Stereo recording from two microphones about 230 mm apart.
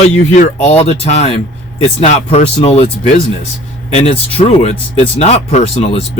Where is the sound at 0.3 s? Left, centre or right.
Left.